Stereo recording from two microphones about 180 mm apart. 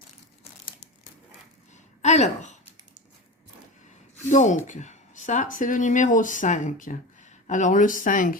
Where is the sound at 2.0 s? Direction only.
40° left (ahead or behind).